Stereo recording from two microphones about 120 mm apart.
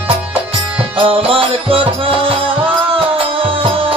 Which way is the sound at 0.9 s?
50° right (ahead or behind).